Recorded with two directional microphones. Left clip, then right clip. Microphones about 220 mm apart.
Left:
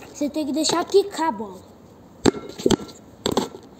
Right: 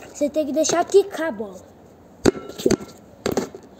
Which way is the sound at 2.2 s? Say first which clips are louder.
Right 1 dB; 10° right (ahead or behind).